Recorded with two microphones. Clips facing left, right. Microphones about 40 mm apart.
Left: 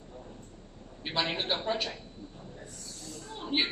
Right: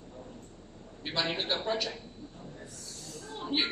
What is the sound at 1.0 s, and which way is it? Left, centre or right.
Speech, centre.